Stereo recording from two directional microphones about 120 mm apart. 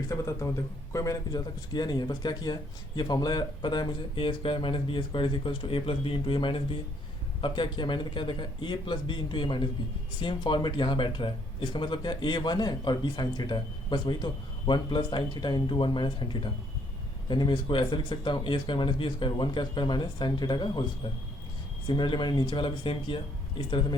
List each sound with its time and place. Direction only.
0.1 s a man's voice: 25° left (ahead or behind)
21.8 s a man's voice: 40° left (ahead or behind)